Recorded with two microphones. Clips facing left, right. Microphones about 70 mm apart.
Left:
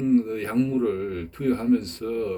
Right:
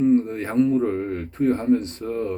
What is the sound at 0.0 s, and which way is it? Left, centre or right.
A man's voice, right.